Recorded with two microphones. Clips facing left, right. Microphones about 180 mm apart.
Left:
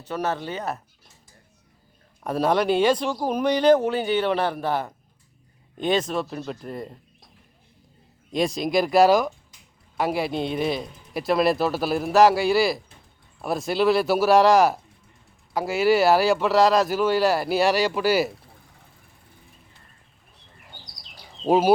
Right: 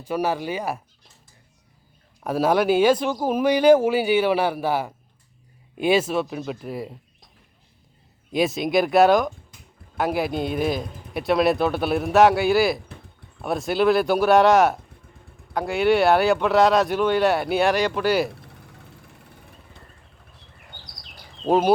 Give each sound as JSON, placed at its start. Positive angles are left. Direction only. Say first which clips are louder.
{"t": 0.0, "sound": "speech", "louder": "right 3 dB", "side_deg": -10}
{"t": 2.2, "sound": "speech", "louder": "right 2 dB", "side_deg": -5}
{"t": 8.3, "sound": "speech", "louder": "right 2 dB", "side_deg": -5}
{"t": 19.0, "sound": "vehicle", "louder": "right 6 dB", "side_deg": -75}
{"t": 21.4, "sound": "speech", "louder": "even", "side_deg": 10}